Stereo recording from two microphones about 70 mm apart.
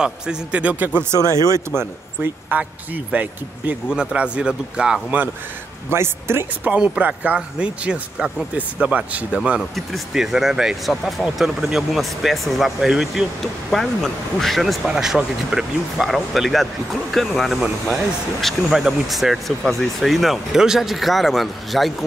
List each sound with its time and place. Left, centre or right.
0.0 s a man's voice: centre
2.5 s speech: right
5.9 s a man's voice: right; by 9.4 s centre
9.8 s speech: centre